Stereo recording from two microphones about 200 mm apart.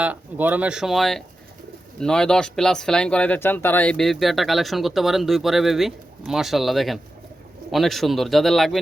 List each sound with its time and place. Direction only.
0.0 s speech: 10° right (ahead or behind)